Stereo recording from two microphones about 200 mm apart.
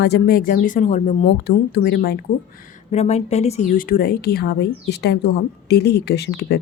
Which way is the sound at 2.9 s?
35° left (ahead or behind).